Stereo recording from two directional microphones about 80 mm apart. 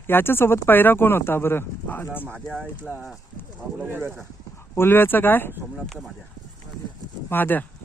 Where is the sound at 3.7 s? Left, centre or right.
Right.